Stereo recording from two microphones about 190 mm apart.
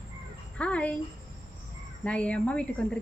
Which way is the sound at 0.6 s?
5° left (ahead or behind).